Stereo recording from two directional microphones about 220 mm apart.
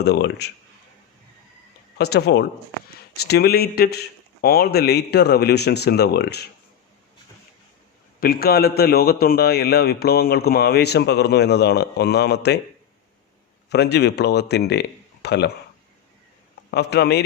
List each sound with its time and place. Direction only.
0.0 s a man's voice: 50° left (ahead or behind)
2.0 s a man's voice: 45° left (ahead or behind)
8.2 s a man's voice: 45° left (ahead or behind)
13.7 s speech: 50° left (ahead or behind)
16.7 s a man's voice: 50° left (ahead or behind)